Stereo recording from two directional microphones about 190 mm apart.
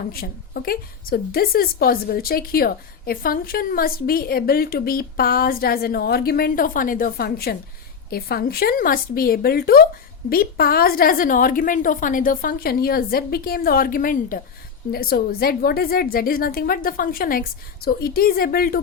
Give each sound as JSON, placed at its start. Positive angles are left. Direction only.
{"t": 0.1, "sound": "a woman's voice", "side_deg": 50}